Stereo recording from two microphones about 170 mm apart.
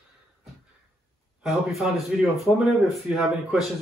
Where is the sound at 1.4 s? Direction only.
Centre (ahead or behind).